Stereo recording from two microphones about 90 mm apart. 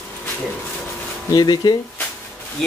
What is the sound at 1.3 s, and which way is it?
Speech, 50° left (ahead or behind).